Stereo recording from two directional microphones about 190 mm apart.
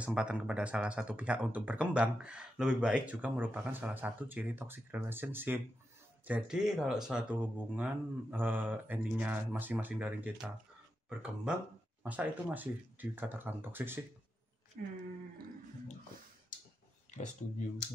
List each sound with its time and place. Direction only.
0.0 s speech: 5° right (ahead or behind)
14.8 s speech: 55° right (ahead or behind)